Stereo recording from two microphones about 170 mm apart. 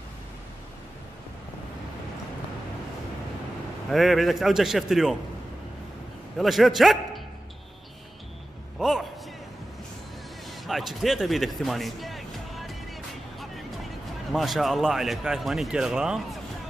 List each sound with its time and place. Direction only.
3.9 s speech: centre (ahead or behind)
6.3 s speech: centre (ahead or behind)
8.7 s a sound: centre (ahead or behind)
10.5 s music: centre (ahead or behind)
14.3 s speech: centre (ahead or behind)